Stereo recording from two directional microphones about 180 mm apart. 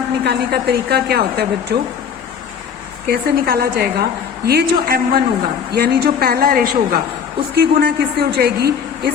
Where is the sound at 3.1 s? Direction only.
60° right (ahead or behind).